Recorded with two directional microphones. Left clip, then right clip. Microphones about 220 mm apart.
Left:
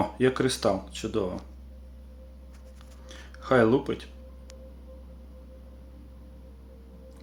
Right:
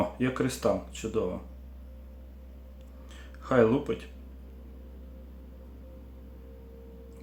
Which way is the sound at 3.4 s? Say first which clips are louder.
Left 2 dB; 10° left (ahead or behind).